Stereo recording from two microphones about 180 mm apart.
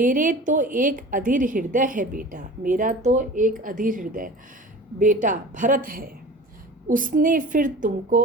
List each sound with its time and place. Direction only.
0.0 s a woman's voice: 45° right (ahead or behind)